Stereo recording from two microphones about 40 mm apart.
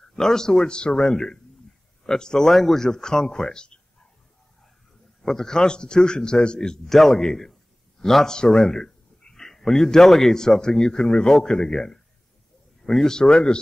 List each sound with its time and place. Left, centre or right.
0.1 s a man's voice: centre
5.2 s a man's voice: centre
6.9 s a man's voice: centre
8.6 s a sound: centre
10.6 s a man's voice: centre